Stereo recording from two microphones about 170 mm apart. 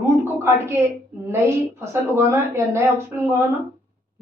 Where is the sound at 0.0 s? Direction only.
15° right (ahead or behind).